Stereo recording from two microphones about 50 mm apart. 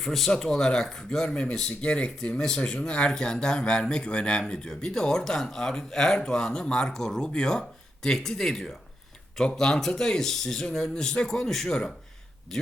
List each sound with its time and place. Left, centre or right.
0.0 s speech: centre